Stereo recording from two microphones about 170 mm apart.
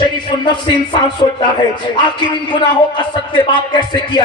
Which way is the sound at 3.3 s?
25° left (ahead or behind).